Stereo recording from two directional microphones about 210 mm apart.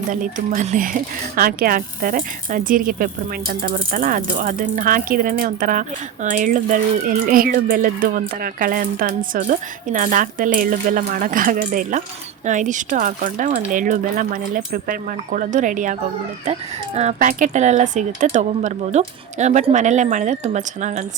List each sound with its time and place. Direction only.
0.1 s speech: 40° right (ahead or behind)